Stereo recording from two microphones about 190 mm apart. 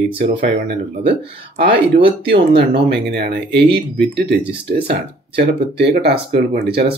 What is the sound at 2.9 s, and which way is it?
Speech, 65° right (ahead or behind).